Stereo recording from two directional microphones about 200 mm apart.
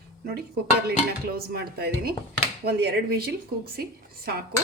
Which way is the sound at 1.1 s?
50° right (ahead or behind).